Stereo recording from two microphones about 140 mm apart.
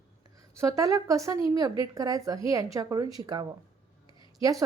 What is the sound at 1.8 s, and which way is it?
A woman's voice, 25° right (ahead or behind).